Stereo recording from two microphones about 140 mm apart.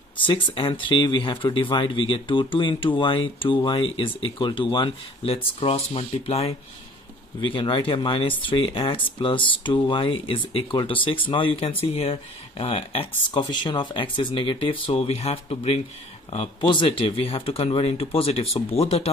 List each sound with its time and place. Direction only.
0.3 s speech: 35° left (ahead or behind)